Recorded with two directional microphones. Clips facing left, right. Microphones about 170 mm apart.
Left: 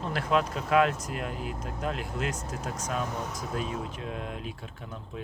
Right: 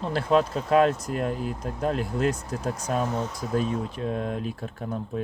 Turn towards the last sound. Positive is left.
turn(degrees=-40)  # may be behind; listen again after turning